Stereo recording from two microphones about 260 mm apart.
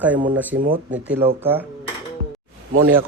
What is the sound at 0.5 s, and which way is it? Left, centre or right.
Speech, right.